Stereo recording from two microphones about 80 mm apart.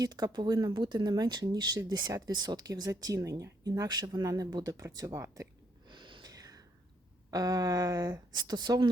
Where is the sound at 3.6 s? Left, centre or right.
Right.